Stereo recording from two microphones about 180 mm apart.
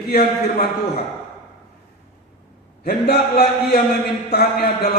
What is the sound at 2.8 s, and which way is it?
A man's voice, 60° left (ahead or behind).